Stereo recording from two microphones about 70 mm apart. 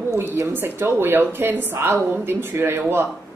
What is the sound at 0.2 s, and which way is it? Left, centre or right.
Speech, right.